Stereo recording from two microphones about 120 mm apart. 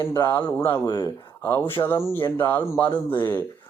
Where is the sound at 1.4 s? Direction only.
20° left (ahead or behind).